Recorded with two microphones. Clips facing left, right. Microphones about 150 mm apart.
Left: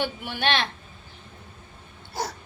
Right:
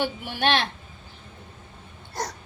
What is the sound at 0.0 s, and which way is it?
Speech, 45° right (ahead or behind).